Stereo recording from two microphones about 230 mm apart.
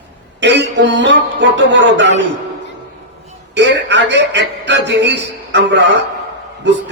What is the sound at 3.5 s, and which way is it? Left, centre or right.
A man's voice, right.